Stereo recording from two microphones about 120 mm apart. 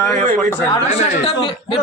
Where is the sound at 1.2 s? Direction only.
45° left (ahead or behind).